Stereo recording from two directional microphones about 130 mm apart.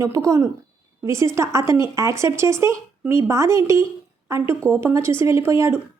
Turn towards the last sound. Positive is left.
turn(degrees=-20)  # may be behind; listen again after turning